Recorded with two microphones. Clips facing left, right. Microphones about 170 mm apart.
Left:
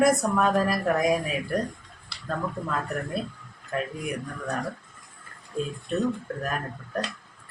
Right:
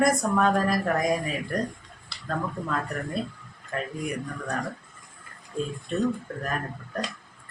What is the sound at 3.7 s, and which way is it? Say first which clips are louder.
Speech: left 2 dB; centre (ahead or behind).